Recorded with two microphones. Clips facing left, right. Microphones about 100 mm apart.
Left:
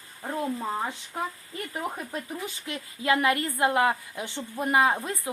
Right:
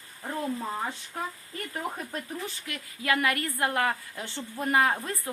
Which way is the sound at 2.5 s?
25° left (ahead or behind).